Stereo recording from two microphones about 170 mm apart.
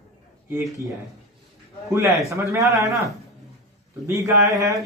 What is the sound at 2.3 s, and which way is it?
Speech, 20° right (ahead or behind).